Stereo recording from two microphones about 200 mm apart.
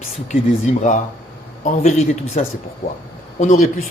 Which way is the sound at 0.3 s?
35° left (ahead or behind).